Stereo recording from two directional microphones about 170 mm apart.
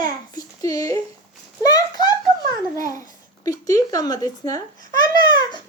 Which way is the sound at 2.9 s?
20° left (ahead or behind).